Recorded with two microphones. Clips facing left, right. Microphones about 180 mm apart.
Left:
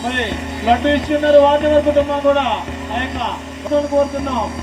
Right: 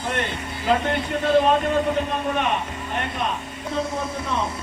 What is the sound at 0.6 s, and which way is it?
Speech, 70° left (ahead or behind).